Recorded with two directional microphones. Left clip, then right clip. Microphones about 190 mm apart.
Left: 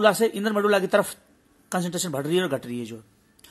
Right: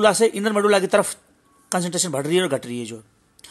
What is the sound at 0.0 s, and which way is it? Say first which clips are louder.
Speech: right 3 dB; 30° right (ahead or behind).